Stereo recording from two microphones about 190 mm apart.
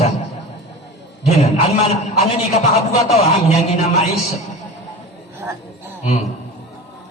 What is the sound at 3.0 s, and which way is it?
Speech, 35° left (ahead or behind).